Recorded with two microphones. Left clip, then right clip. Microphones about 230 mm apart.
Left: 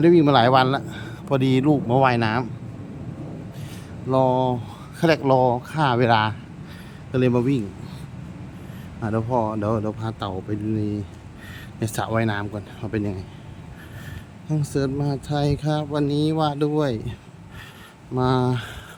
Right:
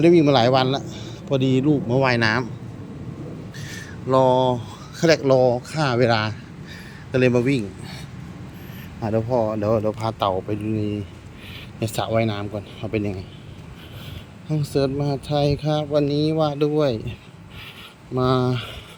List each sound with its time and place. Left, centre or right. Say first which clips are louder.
0.0 s a man's voice: even; centre; by 2.0 s left
2.0 s speech: right 2 dB; centre
3.6 s speech: right 3 dB; centre
9.0 s speech: right 2 dB; centre
11.8 s speech: right 2 dB; centre
14.4 s speech: right 3 dB; centre